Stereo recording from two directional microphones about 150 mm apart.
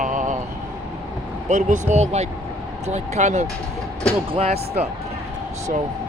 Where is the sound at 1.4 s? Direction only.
55° right (ahead or behind).